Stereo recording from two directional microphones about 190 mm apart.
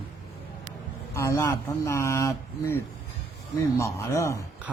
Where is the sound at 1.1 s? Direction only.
15° left (ahead or behind).